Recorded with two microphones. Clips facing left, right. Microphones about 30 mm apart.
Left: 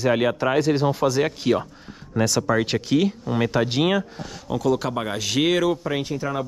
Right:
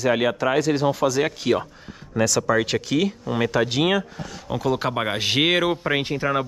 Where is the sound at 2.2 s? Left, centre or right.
Right.